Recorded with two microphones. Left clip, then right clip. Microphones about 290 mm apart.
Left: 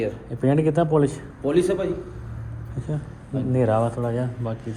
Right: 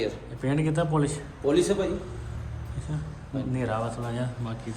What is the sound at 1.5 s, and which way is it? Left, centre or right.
Speech, left.